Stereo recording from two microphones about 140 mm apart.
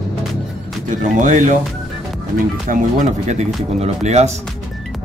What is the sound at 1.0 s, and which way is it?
Speech, 65° right (ahead or behind).